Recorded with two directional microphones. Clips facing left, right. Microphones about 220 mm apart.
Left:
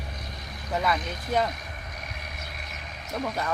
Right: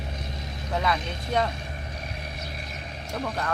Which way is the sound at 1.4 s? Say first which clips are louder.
Right 2 dB; 30° right (ahead or behind).